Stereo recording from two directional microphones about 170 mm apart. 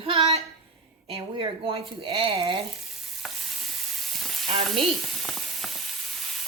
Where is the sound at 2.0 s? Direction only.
30° right (ahead or behind).